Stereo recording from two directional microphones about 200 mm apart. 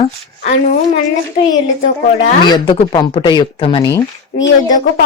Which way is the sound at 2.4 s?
20° left (ahead or behind).